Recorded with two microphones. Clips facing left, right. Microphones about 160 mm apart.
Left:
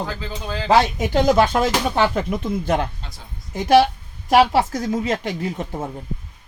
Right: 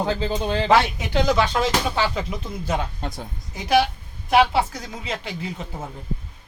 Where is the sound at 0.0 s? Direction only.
30° right (ahead or behind).